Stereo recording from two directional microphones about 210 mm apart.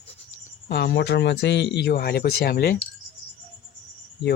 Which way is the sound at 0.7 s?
55° left (ahead or behind).